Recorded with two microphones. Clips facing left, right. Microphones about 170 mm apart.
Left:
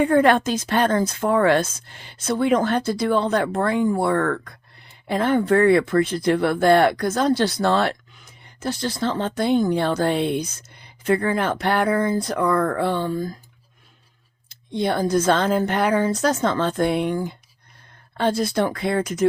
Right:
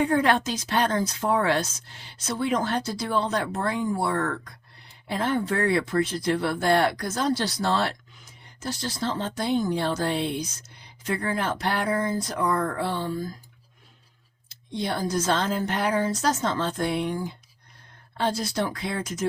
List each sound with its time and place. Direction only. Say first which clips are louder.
0.0 s speech: left 6 dB; 55° left (ahead or behind)
14.5 s speech: left 6 dB; 55° left (ahead or behind)